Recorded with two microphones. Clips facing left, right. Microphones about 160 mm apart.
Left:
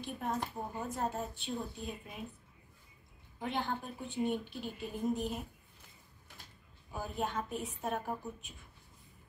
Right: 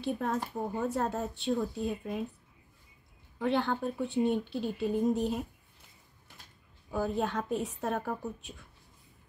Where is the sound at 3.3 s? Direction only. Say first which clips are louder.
Right 8 dB; 70° right (ahead or behind).